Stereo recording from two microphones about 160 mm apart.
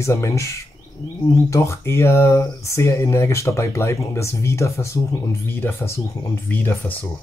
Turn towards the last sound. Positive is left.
turn(degrees=10)  # may be behind; listen again after turning